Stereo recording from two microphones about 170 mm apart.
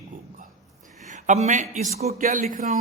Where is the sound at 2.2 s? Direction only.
55° right (ahead or behind).